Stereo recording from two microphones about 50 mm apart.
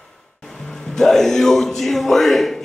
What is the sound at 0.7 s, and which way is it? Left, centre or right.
A man's voice, centre.